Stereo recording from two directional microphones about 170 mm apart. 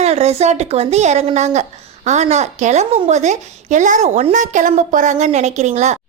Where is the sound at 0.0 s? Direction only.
40° right (ahead or behind).